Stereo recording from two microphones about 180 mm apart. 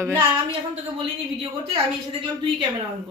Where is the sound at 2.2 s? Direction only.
25° right (ahead or behind).